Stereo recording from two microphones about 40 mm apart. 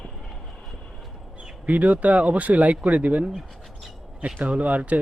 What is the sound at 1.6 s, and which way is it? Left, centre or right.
Speech, right.